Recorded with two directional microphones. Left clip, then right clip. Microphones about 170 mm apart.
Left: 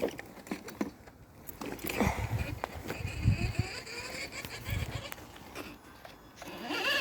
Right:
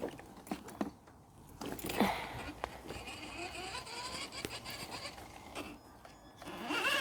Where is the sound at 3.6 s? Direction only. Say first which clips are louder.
Left 2 dB; 10° left (ahead or behind).